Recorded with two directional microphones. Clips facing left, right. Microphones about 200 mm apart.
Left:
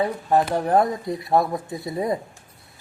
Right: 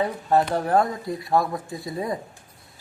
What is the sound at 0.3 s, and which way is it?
Speech, 5° left (ahead or behind).